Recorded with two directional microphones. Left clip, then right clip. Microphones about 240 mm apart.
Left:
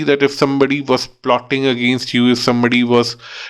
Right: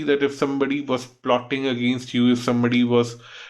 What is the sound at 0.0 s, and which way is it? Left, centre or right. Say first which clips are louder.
Speech: left 7 dB; left.